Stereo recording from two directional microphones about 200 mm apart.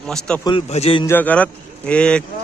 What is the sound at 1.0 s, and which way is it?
A man's voice, 10° left (ahead or behind).